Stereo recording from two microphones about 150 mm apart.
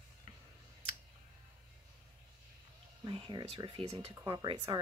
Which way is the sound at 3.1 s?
35° right (ahead or behind).